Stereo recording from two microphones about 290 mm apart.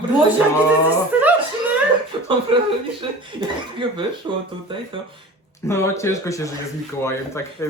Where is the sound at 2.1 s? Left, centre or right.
Centre.